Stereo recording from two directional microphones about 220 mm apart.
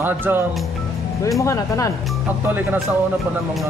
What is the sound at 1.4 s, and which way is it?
Music, 15° left (ahead or behind).